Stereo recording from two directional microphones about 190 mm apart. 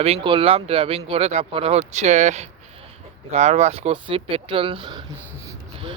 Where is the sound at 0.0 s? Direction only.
30° right (ahead or behind).